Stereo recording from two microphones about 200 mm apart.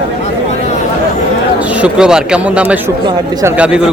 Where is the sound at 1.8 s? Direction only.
5° right (ahead or behind).